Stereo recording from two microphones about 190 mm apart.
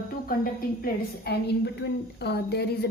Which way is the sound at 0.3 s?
50° left (ahead or behind).